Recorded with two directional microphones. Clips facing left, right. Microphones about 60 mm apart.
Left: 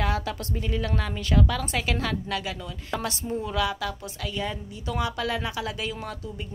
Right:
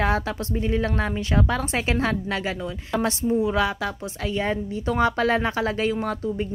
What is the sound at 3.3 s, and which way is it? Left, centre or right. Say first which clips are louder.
Speech: right 10 dB; centre.